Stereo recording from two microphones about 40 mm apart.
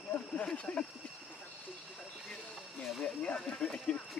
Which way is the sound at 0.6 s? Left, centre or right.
Left.